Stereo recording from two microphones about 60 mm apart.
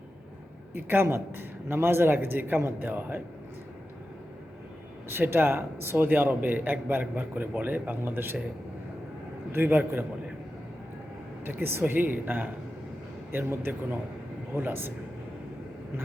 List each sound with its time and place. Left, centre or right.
0.7 s a man's voice: right
5.0 s a man's voice: right
9.5 s a man's voice: right
11.4 s a man's voice: right